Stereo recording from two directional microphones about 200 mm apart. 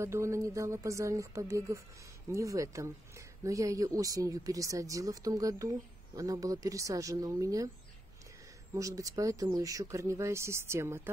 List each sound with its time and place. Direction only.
0.0 s speech: 15° right (ahead or behind)
8.7 s speech: 15° right (ahead or behind)